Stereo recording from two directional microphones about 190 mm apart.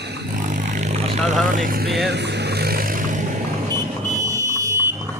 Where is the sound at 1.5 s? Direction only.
45° right (ahead or behind).